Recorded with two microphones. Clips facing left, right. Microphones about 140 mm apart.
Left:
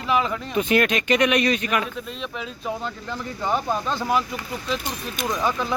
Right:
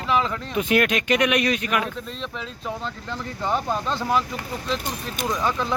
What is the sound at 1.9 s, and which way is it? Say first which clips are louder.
Speech: left 1 dB; 10° left (ahead or behind).